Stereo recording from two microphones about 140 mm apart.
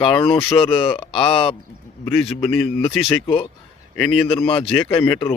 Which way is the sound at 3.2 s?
45° left (ahead or behind).